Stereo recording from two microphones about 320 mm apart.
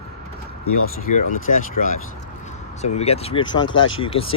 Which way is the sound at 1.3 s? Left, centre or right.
Left.